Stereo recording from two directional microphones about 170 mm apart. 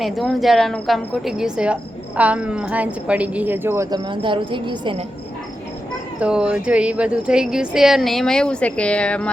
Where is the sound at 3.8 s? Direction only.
25° right (ahead or behind).